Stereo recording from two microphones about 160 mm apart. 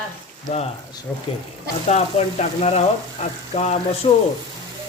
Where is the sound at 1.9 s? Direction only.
45° left (ahead or behind).